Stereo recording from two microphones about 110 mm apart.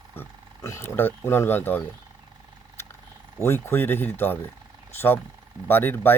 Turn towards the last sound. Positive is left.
turn(degrees=20)  # may be behind; listen again after turning